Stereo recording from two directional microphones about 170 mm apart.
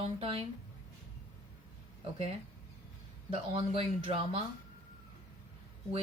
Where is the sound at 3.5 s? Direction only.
30° right (ahead or behind).